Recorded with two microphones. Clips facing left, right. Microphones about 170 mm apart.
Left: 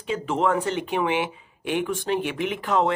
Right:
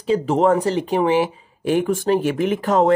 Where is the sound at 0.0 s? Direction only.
35° right (ahead or behind).